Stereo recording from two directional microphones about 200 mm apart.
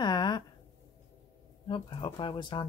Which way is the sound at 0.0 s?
20° left (ahead or behind).